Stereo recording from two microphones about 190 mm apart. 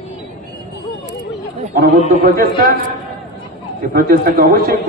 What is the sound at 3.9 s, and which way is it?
Speech, 50° right (ahead or behind).